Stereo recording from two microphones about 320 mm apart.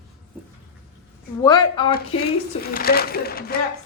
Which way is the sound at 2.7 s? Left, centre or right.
Left.